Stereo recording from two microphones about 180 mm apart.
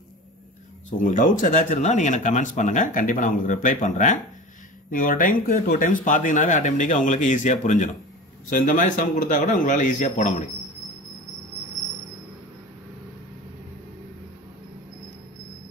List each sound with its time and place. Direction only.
0.9 s speech: 45° left (ahead or behind)